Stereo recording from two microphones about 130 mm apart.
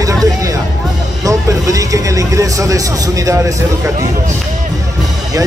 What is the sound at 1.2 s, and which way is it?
Speech, 25° right (ahead or behind).